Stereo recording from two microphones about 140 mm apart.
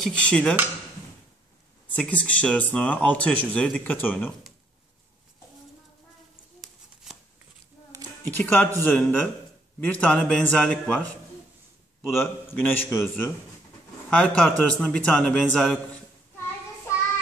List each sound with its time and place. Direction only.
0.0 s speech: 5° left (ahead or behind)
2.0 s speech: 10° left (ahead or behind)
8.2 s speech: 15° left (ahead or behind)
12.1 s speech: 15° left (ahead or behind)
14.1 s speech: 10° left (ahead or behind)